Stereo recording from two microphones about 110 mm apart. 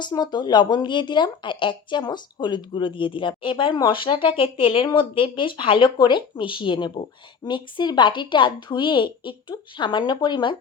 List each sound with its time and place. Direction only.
0.0 s speech: 40° left (ahead or behind)